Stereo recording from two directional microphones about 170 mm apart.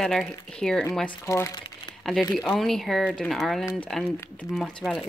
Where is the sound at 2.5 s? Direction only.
Centre (ahead or behind).